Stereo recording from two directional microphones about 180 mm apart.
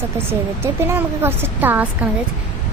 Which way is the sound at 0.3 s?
15° right (ahead or behind).